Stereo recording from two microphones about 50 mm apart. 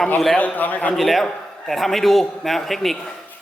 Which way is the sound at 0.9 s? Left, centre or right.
Centre.